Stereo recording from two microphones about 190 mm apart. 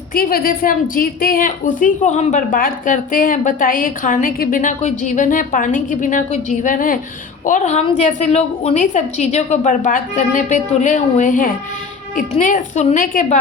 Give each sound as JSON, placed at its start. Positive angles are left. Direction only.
{"t": 0.1, "sound": "a woman's voice", "side_deg": 50}